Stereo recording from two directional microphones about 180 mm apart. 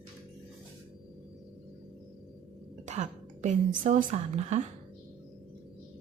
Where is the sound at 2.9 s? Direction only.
40° right (ahead or behind).